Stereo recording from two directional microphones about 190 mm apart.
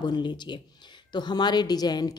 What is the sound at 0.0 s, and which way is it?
A woman's voice, 20° left (ahead or behind).